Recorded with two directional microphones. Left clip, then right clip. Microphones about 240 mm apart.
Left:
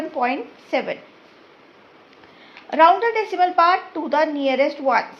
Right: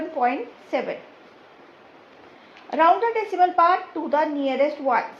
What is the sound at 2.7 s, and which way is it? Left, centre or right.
A woman's voice, left.